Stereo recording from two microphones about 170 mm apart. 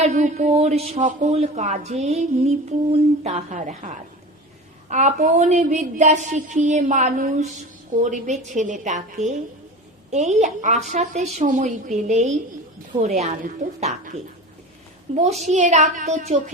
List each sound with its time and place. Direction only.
0.0 s a woman's voice: 45° right (ahead or behind)